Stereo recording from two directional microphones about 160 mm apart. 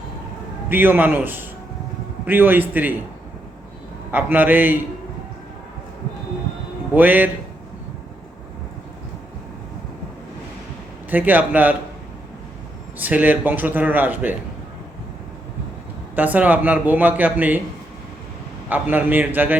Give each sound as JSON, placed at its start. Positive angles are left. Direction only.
{"t": 0.7, "sound": "speech", "side_deg": -10}
{"t": 4.1, "sound": "speech", "side_deg": -10}
{"t": 6.9, "sound": "speech", "side_deg": -10}
{"t": 11.1, "sound": "speech", "side_deg": -10}
{"t": 13.0, "sound": "speech", "side_deg": -10}
{"t": 16.1, "sound": "speech", "side_deg": -10}
{"t": 18.7, "sound": "speech", "side_deg": -10}